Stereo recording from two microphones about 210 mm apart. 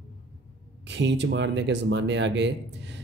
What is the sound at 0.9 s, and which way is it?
Speech, 55° right (ahead or behind).